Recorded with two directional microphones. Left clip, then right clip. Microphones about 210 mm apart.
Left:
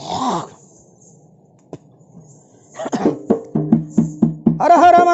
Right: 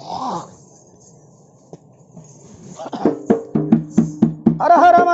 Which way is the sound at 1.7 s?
50° left (ahead or behind).